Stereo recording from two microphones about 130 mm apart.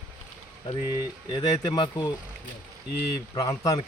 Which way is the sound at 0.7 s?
35° left (ahead or behind).